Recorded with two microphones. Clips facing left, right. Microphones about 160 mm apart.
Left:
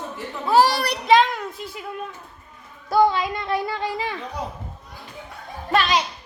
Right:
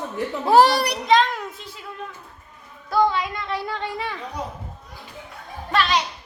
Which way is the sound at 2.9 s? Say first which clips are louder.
Left 2 dB; 20° left (ahead or behind).